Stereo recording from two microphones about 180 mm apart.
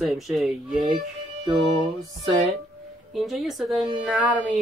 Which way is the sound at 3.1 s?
Centre (ahead or behind).